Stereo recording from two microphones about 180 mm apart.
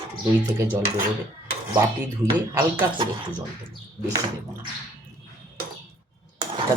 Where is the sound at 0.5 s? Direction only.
15° right (ahead or behind).